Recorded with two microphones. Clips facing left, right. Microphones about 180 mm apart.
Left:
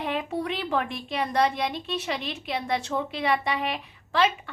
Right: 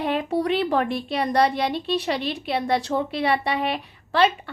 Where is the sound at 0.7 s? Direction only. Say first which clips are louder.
Right 5 dB; 35° right (ahead or behind).